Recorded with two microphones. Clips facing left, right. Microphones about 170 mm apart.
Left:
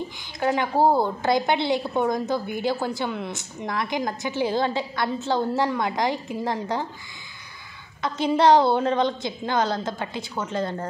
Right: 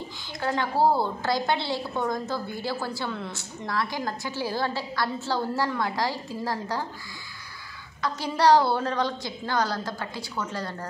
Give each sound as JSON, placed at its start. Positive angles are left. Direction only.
{"t": 0.4, "sound": "a woman's voice", "side_deg": 15}
{"t": 8.0, "sound": "a woman's voice", "side_deg": 20}